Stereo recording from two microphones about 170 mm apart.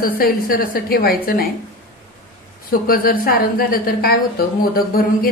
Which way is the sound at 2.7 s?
60° left (ahead or behind).